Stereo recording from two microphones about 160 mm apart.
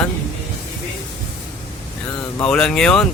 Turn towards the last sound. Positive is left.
turn(degrees=5)  # may be behind; listen again after turning